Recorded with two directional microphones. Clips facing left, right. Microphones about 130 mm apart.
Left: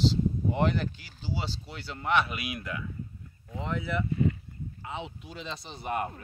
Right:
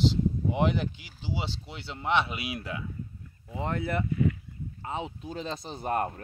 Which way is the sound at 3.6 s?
50° right (ahead or behind).